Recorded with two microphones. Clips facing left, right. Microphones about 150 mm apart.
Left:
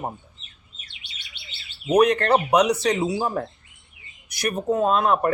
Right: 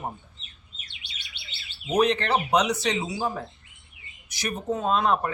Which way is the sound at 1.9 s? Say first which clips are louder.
Left 5 dB; 60° left (ahead or behind).